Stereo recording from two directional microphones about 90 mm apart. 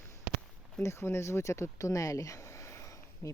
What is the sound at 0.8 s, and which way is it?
Speech, 30° left (ahead or behind).